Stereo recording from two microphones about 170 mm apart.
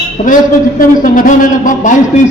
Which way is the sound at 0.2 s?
45° left (ahead or behind).